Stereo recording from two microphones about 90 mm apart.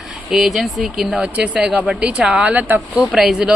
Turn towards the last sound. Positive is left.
turn(degrees=-5)  # may be behind; listen again after turning